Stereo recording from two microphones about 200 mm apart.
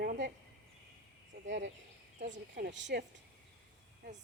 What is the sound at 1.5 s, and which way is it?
Speech, 65° right (ahead or behind).